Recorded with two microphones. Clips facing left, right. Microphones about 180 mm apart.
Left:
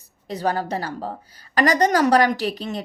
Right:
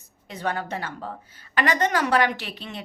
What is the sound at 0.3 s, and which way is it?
A woman's voice, 35° left (ahead or behind).